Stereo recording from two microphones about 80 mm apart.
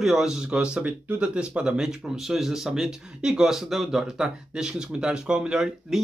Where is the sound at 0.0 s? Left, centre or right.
Centre.